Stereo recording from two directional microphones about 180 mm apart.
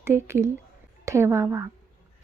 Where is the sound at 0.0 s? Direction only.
15° right (ahead or behind).